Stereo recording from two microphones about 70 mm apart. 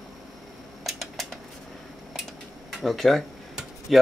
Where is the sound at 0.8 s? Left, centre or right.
Centre.